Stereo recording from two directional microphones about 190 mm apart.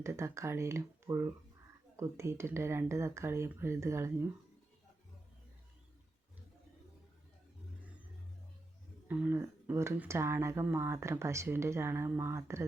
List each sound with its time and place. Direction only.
0.0 s speech: 15° right (ahead or behind)
9.0 s speech: 10° right (ahead or behind)